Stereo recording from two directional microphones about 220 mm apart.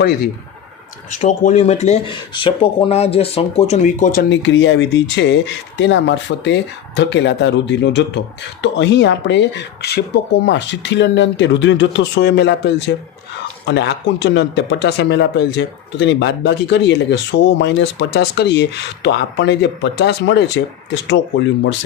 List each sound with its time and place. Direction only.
1.2 s speech: 30° left (ahead or behind)
4.3 s speech: 55° left (ahead or behind)